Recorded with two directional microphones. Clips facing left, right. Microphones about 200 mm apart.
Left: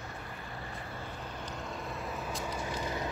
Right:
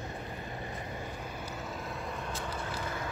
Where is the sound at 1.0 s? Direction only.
5° right (ahead or behind).